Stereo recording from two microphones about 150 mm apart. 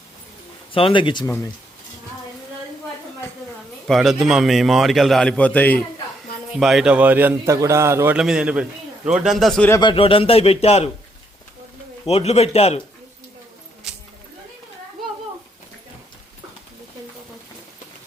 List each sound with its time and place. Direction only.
0.7 s speech: 35° left (ahead or behind)
3.8 s a man's voice: centre (ahead or behind)
6.6 s a man's voice: centre (ahead or behind)
9.8 s speech: 35° left (ahead or behind)
12.0 s a man's voice: 45° left (ahead or behind)
13.9 s a sound: 5° right (ahead or behind)